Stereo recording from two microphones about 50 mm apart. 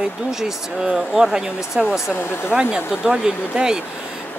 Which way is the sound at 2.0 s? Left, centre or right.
Left.